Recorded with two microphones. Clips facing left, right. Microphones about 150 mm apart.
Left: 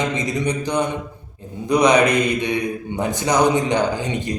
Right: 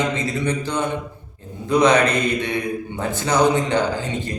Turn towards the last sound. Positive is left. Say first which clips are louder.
# left 2 dB
turn(degrees=15)  # may be behind; listen again after turning